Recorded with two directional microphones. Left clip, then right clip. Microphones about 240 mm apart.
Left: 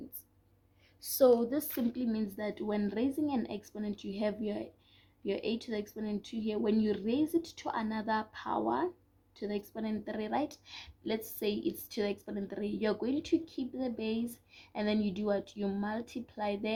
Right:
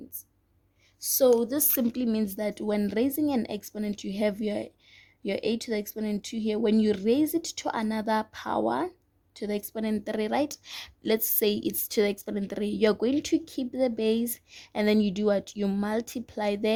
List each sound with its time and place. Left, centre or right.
1.0 s speech: right